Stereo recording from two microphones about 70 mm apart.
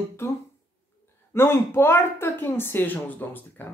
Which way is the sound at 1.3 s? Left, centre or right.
Left.